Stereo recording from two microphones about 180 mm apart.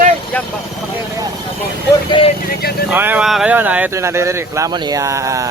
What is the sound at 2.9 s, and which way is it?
Speech, 10° right (ahead or behind).